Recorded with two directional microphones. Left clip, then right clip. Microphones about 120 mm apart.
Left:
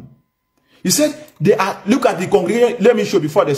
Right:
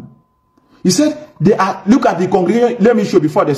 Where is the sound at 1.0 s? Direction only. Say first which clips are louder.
Right 1 dB; 20° left (ahead or behind).